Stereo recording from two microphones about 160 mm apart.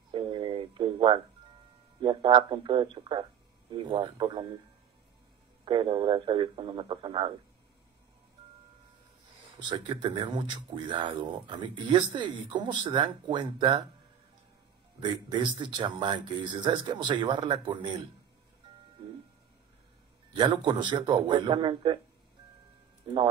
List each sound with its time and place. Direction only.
0.1 s telephone: 30° right (ahead or behind)
2.0 s speech: 30° right (ahead or behind)
5.7 s speech: 30° right (ahead or behind)
9.6 s speech: 30° right (ahead or behind)
15.0 s speech: 30° right (ahead or behind)
20.3 s speech: 30° right (ahead or behind)
23.1 s speech: 30° right (ahead or behind)